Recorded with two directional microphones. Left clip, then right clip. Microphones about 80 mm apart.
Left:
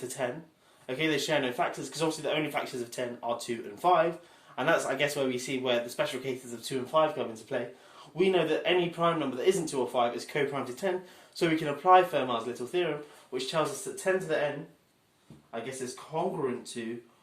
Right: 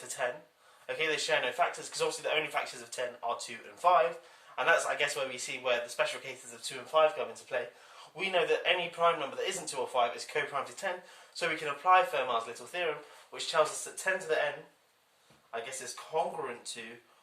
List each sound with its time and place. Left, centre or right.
0.0 s a sound: left
0.9 s speech: left
13.9 s speech: centre
16.1 s speech: centre